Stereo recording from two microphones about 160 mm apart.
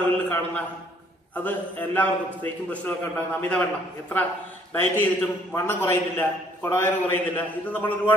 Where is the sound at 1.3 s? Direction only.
10° left (ahead or behind).